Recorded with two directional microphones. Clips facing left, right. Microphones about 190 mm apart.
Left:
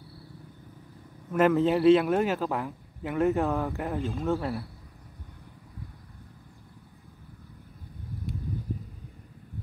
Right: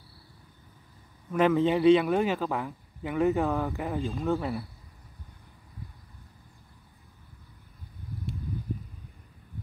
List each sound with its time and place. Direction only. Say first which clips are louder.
1.3 s a man's voice: left 1 dB; centre (ahead or behind)